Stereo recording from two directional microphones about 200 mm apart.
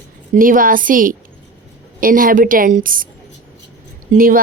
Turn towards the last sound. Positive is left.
turn(degrees=-45)  # may be behind; listen again after turning